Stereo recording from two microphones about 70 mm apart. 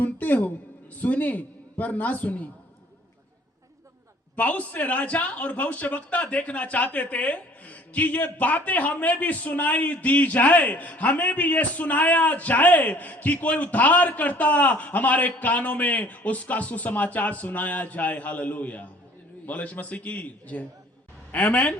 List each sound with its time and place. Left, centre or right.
0.0 s a sound: left
0.9 s speech: left
4.4 s speech: left